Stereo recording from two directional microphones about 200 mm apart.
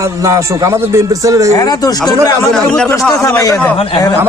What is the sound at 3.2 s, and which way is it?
Speech, 15° left (ahead or behind).